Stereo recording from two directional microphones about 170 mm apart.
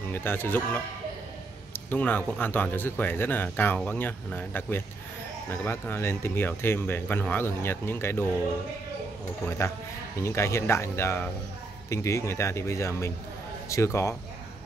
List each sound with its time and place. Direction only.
0.1 s speech: 10° left (ahead or behind)
10.2 s speech: 15° left (ahead or behind)